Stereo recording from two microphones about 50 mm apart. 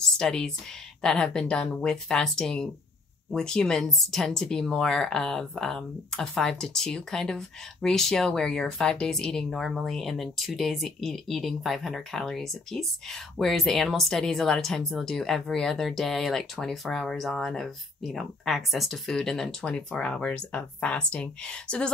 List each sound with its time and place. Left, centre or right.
0.2 s speech: centre
19.6 s speech: centre